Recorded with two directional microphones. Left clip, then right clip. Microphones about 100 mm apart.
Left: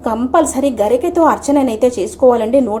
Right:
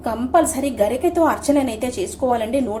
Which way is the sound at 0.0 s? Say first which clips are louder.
Left 4 dB; 40° left (ahead or behind).